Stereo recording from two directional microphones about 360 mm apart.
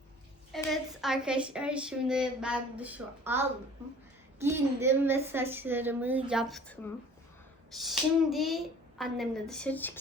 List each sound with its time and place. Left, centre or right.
0.5 s a woman's voice: centre
7.8 s a woman's voice: centre